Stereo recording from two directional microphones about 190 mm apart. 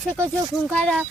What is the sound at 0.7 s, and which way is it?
Speech, 5° left (ahead or behind).